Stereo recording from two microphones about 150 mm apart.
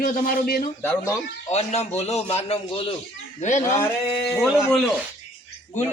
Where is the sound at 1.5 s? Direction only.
45° left (ahead or behind).